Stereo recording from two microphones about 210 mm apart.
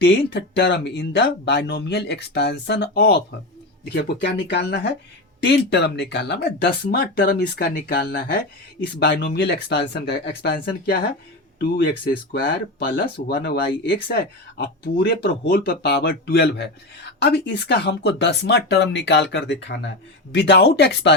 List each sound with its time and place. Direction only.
0.0 s speech: 55° left (ahead or behind)